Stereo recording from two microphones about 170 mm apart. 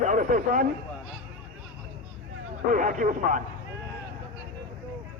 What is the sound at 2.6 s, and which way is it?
Speech, 50° right (ahead or behind).